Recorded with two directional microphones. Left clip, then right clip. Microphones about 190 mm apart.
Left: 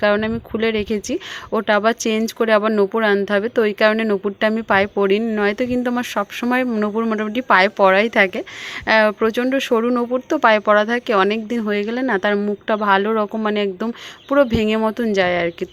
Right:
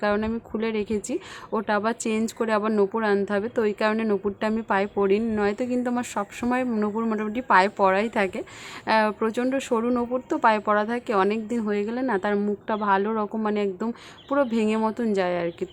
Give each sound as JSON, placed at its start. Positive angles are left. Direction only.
{"t": 0.0, "sound": "speech", "side_deg": 20}